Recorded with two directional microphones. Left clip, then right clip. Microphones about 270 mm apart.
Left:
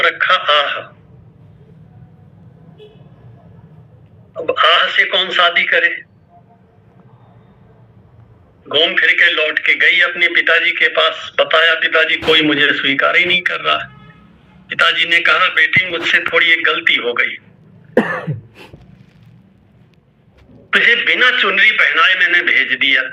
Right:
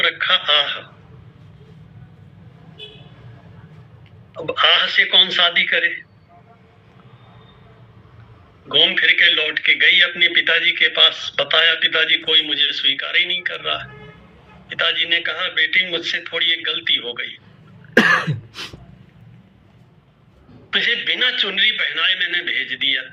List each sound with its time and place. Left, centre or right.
0.0 s a man's voice: centre
4.4 s a man's voice: centre
8.7 s a man's voice: centre
17.9 s cough: centre
20.7 s a man's voice: centre